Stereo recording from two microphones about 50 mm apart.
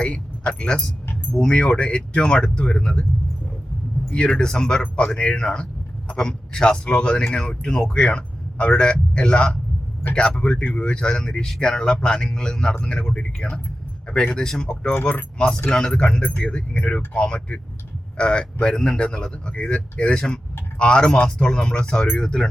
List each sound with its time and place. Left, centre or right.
0.0 s speech: left
4.1 s a man's voice: centre
10.7 s speech: centre